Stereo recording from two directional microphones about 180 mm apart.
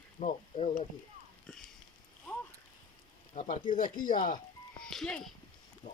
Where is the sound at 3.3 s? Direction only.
45° left (ahead or behind).